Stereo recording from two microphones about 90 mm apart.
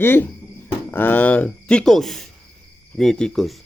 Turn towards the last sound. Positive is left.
turn(degrees=5)  # may be behind; listen again after turning